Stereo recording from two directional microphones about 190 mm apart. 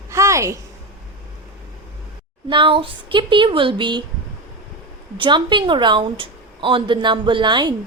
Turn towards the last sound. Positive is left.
turn(degrees=-25)  # may be behind; listen again after turning